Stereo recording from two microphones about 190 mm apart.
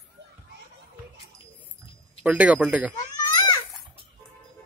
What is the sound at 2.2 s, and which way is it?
Speech, 10° right (ahead or behind).